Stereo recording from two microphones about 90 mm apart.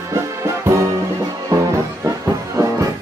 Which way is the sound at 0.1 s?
35° right (ahead or behind).